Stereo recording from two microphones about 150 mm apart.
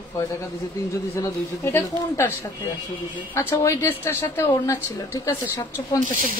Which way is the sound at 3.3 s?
20° left (ahead or behind).